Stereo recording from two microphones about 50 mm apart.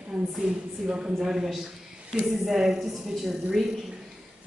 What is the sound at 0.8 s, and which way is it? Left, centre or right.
A woman's voice, centre.